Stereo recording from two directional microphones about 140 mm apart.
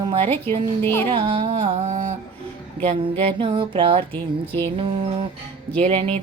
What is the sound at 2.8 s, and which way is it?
Speech, 45° right (ahead or behind).